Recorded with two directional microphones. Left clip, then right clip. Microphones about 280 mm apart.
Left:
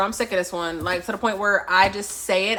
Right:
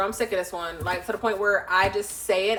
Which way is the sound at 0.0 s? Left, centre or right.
Left.